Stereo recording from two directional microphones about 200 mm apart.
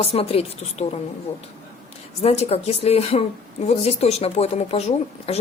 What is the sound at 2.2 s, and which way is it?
A woman's voice, 30° left (ahead or behind).